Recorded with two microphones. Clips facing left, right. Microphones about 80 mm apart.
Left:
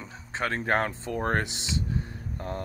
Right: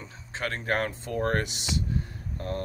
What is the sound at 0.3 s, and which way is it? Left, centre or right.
Speech, left.